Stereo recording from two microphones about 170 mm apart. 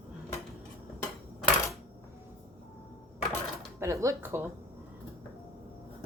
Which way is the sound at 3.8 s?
20° right (ahead or behind).